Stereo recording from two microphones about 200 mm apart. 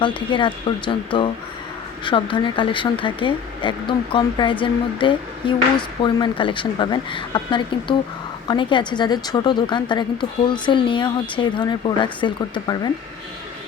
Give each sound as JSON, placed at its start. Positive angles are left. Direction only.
{"t": 0.3, "sound": "speech", "side_deg": 25}